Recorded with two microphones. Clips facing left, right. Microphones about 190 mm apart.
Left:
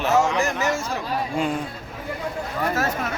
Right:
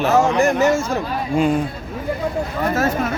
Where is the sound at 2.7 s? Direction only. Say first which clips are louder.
Right 6 dB; 25° right (ahead or behind).